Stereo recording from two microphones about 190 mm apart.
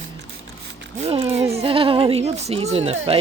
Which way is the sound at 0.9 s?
30° right (ahead or behind).